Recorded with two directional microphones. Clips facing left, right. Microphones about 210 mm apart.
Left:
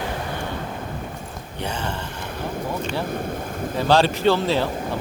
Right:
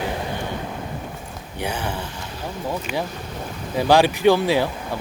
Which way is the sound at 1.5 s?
10° right (ahead or behind).